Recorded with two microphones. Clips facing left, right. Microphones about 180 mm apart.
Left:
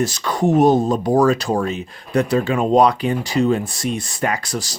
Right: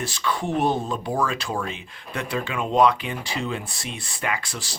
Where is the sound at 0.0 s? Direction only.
40° left (ahead or behind).